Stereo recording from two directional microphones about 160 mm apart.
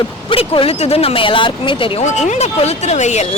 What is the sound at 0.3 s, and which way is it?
Speech, 35° left (ahead or behind).